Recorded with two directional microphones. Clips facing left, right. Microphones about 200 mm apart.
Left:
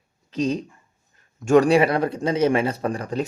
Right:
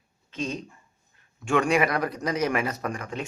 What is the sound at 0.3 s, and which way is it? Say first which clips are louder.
A man's voice: left 8 dB; 40° left (ahead or behind).